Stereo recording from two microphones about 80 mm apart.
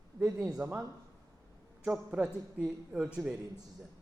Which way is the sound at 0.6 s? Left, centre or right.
Right.